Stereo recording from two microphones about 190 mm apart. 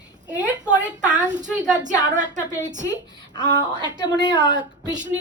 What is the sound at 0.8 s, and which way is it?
A woman's voice, 40° right (ahead or behind).